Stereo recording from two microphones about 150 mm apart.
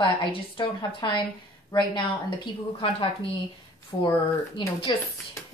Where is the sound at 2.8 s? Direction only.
35° left (ahead or behind).